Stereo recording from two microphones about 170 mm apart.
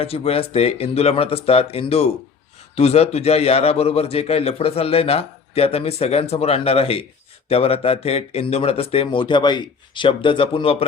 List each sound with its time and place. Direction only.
0.0 s a man's voice: 35° left (ahead or behind)